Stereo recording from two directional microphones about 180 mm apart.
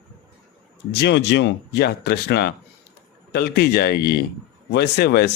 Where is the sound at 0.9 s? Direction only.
70° left (ahead or behind).